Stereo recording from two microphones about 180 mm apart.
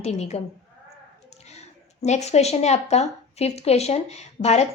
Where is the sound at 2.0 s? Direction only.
40° left (ahead or behind).